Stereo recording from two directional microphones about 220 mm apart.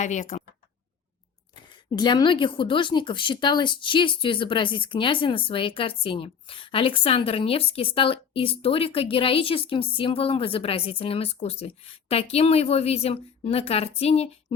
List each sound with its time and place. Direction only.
0.0 s speech: 35° left (ahead or behind)
1.7 s a woman's voice: 20° left (ahead or behind)